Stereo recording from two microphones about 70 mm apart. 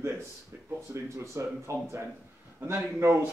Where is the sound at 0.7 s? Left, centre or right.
Right.